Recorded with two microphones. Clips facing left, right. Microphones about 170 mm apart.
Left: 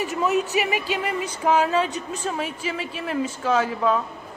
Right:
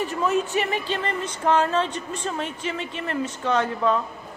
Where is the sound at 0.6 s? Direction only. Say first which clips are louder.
Left 1 dB; 10° left (ahead or behind).